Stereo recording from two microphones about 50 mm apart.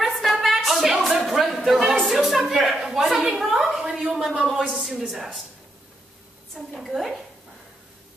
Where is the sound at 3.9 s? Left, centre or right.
Centre.